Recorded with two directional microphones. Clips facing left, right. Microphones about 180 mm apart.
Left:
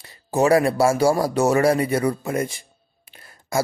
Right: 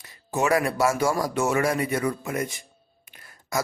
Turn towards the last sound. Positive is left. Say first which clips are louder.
# left 4 dB
turn(degrees=30)  # may be behind; listen again after turning